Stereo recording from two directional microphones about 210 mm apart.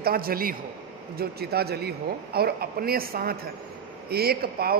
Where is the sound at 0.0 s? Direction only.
45° right (ahead or behind).